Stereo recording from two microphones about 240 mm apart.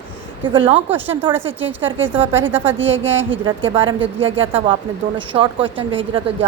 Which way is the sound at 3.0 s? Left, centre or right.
Centre.